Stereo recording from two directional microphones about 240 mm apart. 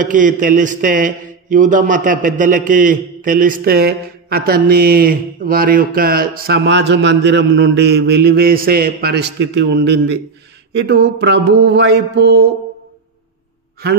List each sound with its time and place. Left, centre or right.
0.0 s a man's voice: right
10.9 s mantra: right